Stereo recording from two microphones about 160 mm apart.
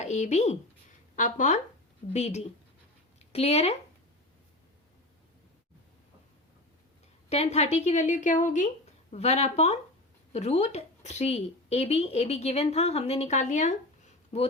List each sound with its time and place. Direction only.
0.0 s speech: 45° left (ahead or behind)
7.3 s speech: 40° left (ahead or behind)
9.1 s speech: 40° left (ahead or behind)